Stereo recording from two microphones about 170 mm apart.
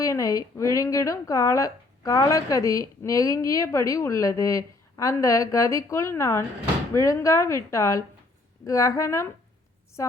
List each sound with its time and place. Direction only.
0.0 s a woman's voice: 20° left (ahead or behind)